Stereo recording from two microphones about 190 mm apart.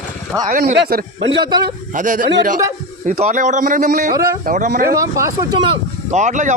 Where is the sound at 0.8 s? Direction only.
50° right (ahead or behind).